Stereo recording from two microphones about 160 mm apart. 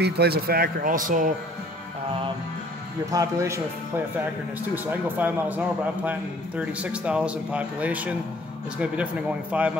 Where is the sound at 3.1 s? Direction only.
20° right (ahead or behind).